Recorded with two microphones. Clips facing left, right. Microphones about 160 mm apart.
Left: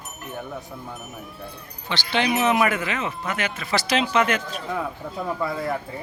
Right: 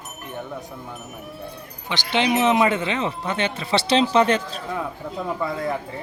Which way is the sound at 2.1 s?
20° right (ahead or behind).